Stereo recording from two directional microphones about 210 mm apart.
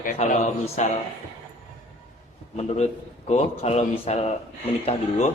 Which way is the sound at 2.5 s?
30° left (ahead or behind).